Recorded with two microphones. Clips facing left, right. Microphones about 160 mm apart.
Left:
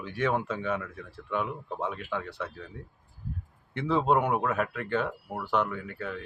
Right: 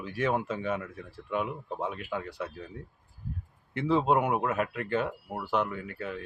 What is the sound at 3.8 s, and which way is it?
Speech, 5° right (ahead or behind).